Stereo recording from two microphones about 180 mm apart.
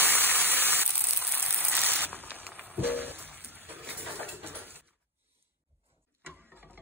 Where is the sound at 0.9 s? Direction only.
5° right (ahead or behind).